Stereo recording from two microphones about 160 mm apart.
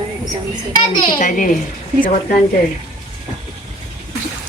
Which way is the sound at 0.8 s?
30° left (ahead or behind).